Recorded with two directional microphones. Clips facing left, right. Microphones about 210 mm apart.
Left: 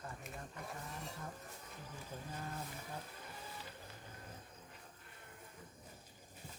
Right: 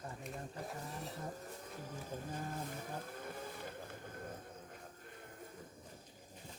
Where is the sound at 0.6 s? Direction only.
35° right (ahead or behind).